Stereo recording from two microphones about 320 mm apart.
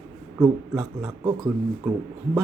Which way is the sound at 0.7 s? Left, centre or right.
Centre.